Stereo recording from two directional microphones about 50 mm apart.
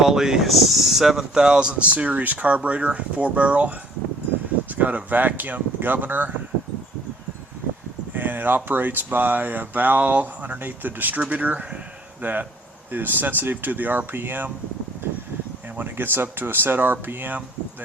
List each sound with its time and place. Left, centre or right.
0.0 s speech: centre
1.9 s speech: right
8.1 s speech: right
15.8 s speech: right